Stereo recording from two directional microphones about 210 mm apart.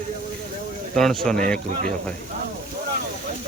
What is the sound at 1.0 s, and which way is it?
Speech, centre (ahead or behind).